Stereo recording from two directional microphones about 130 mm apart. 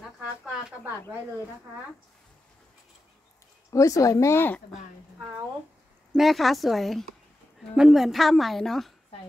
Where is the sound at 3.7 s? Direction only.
25° left (ahead or behind).